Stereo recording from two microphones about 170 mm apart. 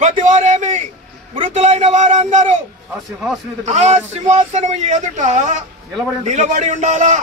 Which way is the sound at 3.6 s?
45° right (ahead or behind).